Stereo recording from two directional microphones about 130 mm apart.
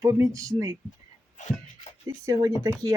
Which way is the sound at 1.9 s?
60° left (ahead or behind).